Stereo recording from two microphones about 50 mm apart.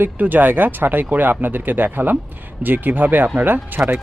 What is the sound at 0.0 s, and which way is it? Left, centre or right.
Speech, right.